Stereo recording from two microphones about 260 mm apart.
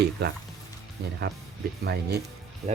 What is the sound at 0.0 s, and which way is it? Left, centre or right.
Speech, right.